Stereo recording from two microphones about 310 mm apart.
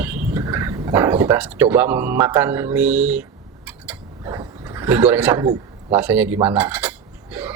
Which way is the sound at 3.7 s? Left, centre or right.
Centre.